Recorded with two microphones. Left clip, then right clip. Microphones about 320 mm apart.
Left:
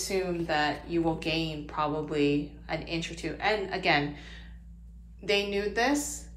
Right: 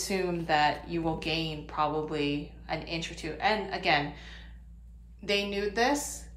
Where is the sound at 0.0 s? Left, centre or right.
Centre.